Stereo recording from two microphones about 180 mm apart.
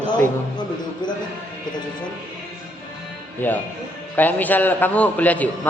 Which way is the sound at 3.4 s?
10° left (ahead or behind).